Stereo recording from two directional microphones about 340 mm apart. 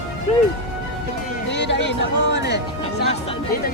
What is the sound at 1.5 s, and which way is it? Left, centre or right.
Music, left.